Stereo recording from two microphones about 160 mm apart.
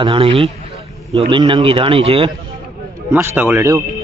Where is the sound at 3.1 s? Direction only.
15° right (ahead or behind).